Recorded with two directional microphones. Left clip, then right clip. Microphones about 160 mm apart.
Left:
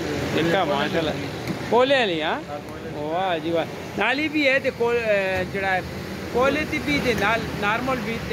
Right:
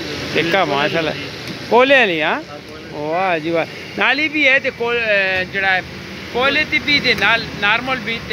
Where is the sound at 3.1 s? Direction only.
40° right (ahead or behind).